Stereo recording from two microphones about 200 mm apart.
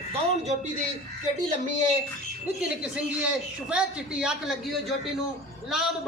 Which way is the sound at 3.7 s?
5° right (ahead or behind).